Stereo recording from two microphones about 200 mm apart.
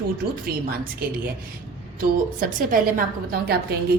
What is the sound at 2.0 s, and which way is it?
A woman's voice, 45° right (ahead or behind).